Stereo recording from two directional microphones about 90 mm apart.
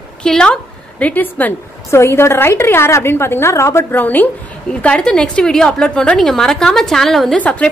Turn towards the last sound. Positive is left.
turn(degrees=15)  # may be behind; listen again after turning